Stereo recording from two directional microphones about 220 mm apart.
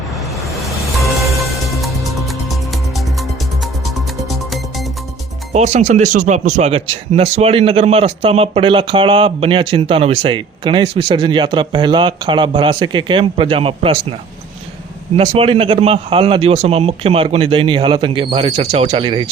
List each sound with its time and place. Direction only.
1.8 s music: centre (ahead or behind)
3.8 s music: centre (ahead or behind)
5.5 s a man's voice: 30° right (ahead or behind)
15.1 s a man's voice: 25° right (ahead or behind)